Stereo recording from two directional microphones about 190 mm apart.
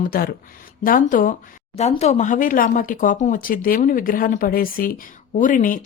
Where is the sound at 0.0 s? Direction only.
50° left (ahead or behind).